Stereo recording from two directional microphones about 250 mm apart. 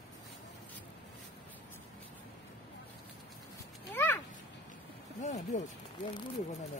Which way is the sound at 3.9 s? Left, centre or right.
Centre.